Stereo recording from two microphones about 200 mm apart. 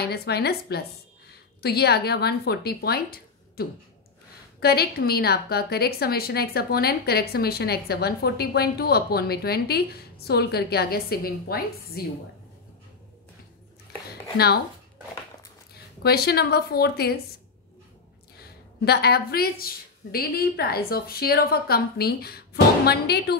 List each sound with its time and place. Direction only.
0.0 s a woman's voice: 55° left (ahead or behind)
14.3 s speech: 55° left (ahead or behind)
16.0 s a woman's voice: 50° left (ahead or behind)
18.9 s a woman's voice: 55° left (ahead or behind)